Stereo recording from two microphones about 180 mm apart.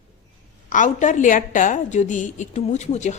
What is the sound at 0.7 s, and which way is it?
A woman's voice, 45° left (ahead or behind).